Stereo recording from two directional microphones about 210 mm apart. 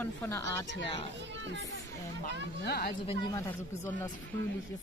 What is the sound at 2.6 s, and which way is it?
Speech, 50° left (ahead or behind).